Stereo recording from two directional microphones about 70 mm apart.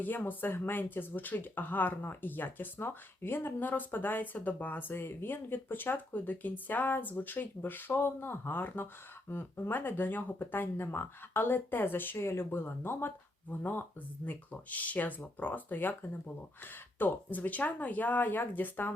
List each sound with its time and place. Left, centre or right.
0.0 s speech: left